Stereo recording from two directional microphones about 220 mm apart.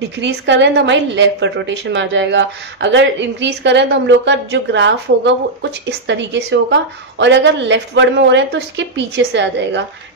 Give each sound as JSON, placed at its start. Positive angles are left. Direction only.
{"t": 0.2, "sound": "a woman's voice", "side_deg": -55}